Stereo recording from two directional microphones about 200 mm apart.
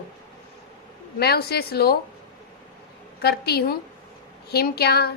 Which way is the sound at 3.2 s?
55° left (ahead or behind).